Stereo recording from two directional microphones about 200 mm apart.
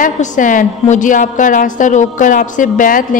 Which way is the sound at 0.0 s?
40° left (ahead or behind).